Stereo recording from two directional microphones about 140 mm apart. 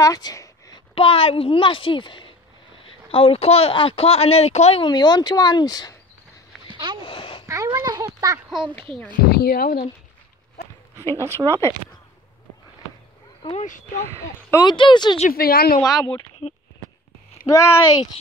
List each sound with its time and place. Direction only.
0.0 s a sound: 25° left (ahead or behind)
0.9 s a woman's voice: 40° left (ahead or behind)
4.8 s a woman's voice: 30° left (ahead or behind)
6.7 s a sound: 35° right (ahead or behind)
7.0 s a sound: 40° left (ahead or behind)
7.4 s a child's voice: 20° right (ahead or behind)
8.5 s a child's voice: centre (ahead or behind)
9.3 s speech: 90° left
11.1 s speech: 20° right (ahead or behind)
13.4 s speech: 40° left (ahead or behind)
14.5 s a woman's voice: 30° left (ahead or behind)
15.1 s speech: 80° left
15.8 s speech: 25° left (ahead or behind)
17.5 s speech: 20° left (ahead or behind)